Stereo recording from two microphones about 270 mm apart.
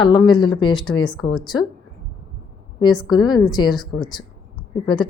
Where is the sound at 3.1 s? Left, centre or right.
Centre.